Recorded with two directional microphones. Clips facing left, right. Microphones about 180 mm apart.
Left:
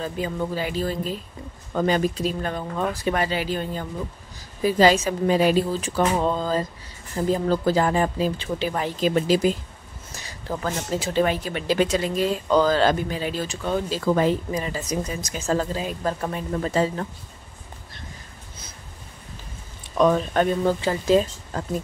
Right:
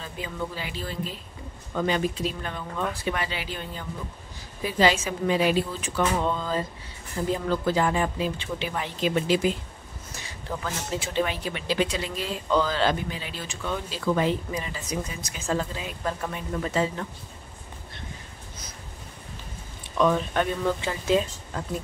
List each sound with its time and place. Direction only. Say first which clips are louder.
0.0 s speech: left 6 dB; 45° left (ahead or behind)
20.0 s speech: left 4 dB; 40° left (ahead or behind)